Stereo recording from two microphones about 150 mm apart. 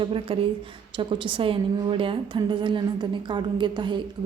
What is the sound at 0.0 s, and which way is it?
A woman's voice, 35° right (ahead or behind).